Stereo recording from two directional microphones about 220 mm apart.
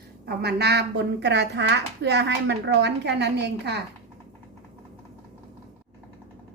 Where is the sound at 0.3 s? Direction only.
45° right (ahead or behind).